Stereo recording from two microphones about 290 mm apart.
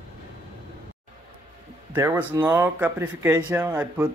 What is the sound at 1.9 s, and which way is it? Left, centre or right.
Speech, centre.